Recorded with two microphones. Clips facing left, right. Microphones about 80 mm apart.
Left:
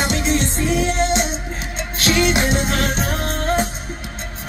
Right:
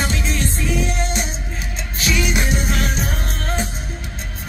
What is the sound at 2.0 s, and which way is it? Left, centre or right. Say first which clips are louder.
Music: left 4 dB; left.